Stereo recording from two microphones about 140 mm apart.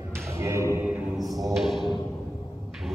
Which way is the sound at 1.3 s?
25° right (ahead or behind).